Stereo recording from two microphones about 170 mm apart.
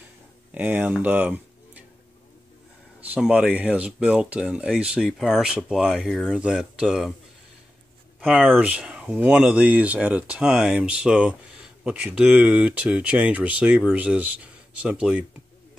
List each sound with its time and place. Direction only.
0.6 s speech: 10° right (ahead or behind)
3.0 s speech: 5° right (ahead or behind)
8.2 s speech: centre (ahead or behind)